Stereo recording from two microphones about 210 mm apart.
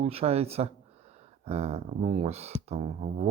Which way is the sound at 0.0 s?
30° right (ahead or behind).